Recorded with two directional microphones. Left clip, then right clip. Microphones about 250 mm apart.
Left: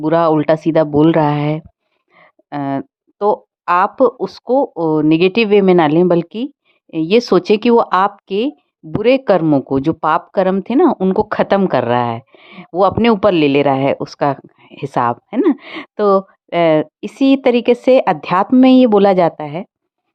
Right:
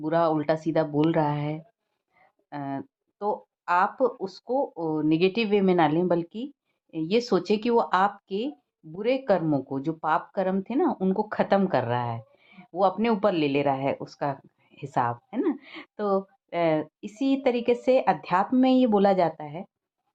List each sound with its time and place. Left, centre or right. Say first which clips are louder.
0.0 s speech: left 11 dB; left